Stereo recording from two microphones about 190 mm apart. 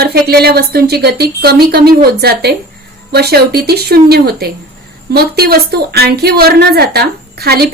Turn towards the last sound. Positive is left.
turn(degrees=-55)  # may be behind; listen again after turning